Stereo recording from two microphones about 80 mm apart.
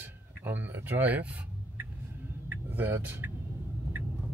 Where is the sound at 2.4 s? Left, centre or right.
Right.